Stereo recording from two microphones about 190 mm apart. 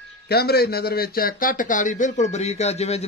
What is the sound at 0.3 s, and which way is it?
Speech, 55° left (ahead or behind).